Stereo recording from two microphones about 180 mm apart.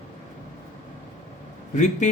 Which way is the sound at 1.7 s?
40° left (ahead or behind).